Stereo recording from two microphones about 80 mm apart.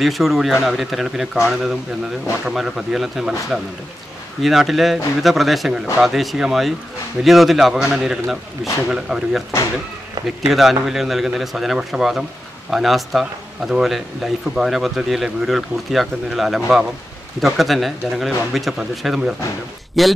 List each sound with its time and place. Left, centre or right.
0.0 s speech: centre
10.2 s speech: right
10.5 s speech: centre